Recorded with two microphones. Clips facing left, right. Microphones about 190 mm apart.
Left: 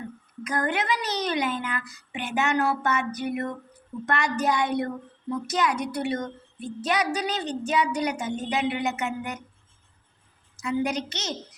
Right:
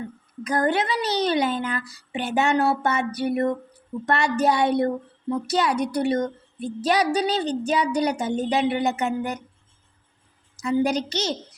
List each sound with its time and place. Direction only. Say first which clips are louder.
0.4 s a woman's voice: right 4 dB; 35° right (ahead or behind)
10.6 s a woman's voice: right 5 dB; 35° right (ahead or behind)